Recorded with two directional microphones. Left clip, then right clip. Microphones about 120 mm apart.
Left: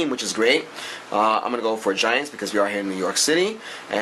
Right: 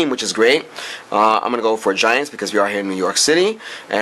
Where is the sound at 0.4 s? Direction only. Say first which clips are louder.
Right 5 dB; 40° right (ahead or behind).